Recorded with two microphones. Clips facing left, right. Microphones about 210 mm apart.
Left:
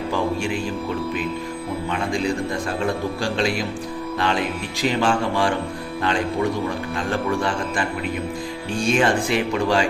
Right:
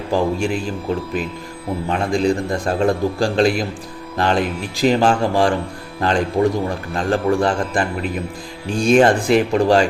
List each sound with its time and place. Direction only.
0.1 s music: 35° right (ahead or behind)
2.6 s music: 40° right (ahead or behind)
9.0 s music: 40° right (ahead or behind)